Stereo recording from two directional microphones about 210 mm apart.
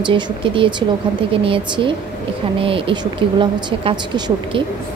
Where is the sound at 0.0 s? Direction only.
25° right (ahead or behind).